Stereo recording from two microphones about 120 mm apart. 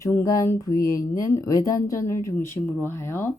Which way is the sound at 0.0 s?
25° left (ahead or behind).